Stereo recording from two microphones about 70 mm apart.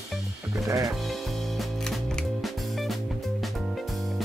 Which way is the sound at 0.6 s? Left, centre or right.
Right.